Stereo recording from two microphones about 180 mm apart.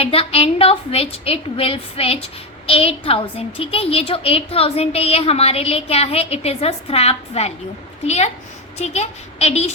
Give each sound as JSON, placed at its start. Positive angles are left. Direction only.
{"t": 0.0, "sound": "a woman's voice", "side_deg": 30}